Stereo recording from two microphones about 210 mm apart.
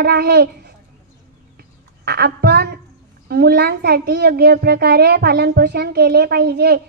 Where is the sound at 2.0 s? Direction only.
50° right (ahead or behind).